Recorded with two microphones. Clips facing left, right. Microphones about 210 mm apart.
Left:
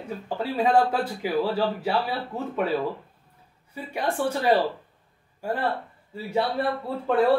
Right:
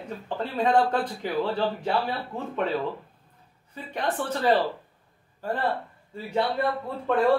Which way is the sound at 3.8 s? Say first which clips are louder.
Left 2 dB; 10° left (ahead or behind).